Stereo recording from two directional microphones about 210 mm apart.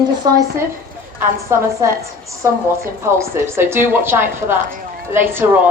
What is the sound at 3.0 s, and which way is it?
Speech, 10° right (ahead or behind).